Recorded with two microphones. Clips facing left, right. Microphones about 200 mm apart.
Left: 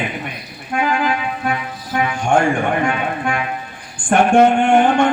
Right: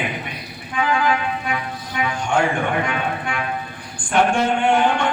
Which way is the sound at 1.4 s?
50° left (ahead or behind).